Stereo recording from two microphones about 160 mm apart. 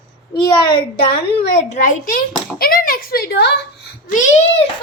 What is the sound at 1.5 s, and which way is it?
A child's voice, 50° left (ahead or behind).